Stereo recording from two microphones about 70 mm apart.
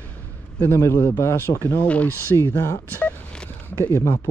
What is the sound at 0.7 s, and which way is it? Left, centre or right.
Speech, left.